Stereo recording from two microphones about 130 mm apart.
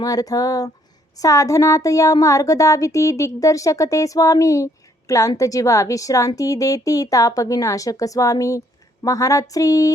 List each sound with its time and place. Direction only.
0.0 s speech: 30° left (ahead or behind)